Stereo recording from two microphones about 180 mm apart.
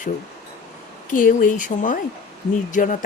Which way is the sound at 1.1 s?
50° left (ahead or behind).